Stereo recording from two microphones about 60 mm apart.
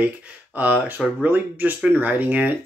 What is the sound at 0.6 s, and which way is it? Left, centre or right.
Speech, right.